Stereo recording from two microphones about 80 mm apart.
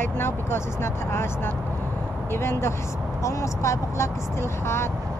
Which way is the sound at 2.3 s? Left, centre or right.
Left.